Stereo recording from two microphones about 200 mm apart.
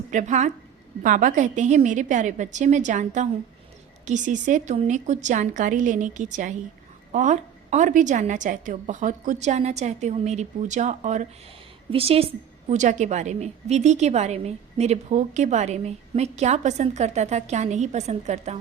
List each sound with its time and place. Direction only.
0.1 s a woman's voice: 35° right (ahead or behind)